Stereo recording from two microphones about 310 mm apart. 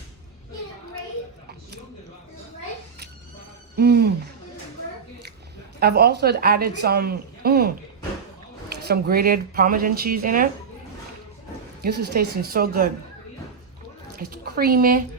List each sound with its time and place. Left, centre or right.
3.8 s a woman's voice: right
5.8 s a woman's voice: right
8.7 s speech: right
11.8 s speech: right
14.2 s speech: right